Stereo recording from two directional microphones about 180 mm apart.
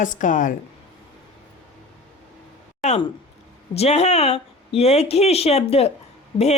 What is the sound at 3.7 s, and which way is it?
Speech, 35° left (ahead or behind).